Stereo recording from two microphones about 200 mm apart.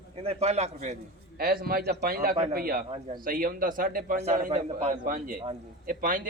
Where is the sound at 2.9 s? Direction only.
30° right (ahead or behind).